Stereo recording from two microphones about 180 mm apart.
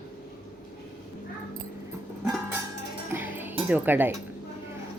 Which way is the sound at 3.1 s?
10° right (ahead or behind).